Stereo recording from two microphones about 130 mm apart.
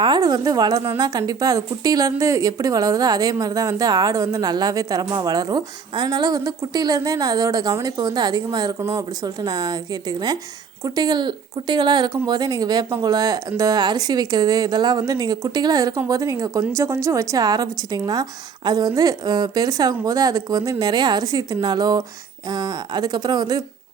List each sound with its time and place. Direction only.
0.0 s a woman's voice: 30° right (ahead or behind)